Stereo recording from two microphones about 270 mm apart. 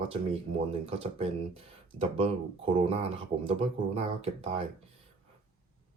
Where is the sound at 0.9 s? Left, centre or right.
Right.